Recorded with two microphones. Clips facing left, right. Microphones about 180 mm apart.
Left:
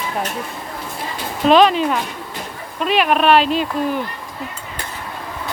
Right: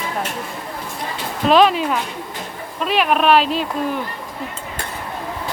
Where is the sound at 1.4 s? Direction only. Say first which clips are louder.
Left 1 dB; centre (ahead or behind).